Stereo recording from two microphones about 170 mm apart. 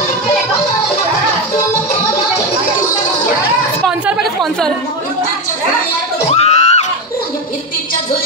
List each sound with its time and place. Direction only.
3.8 s chatter: centre (ahead or behind)
6.3 s screaming: 40° left (ahead or behind)